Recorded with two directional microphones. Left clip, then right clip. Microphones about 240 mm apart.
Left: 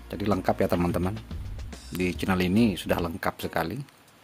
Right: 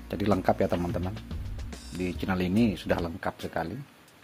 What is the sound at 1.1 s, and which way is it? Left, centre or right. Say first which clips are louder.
Music: left 1 dB; centre.